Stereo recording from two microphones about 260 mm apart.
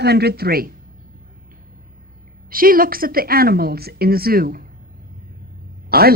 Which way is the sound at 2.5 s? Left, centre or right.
Right.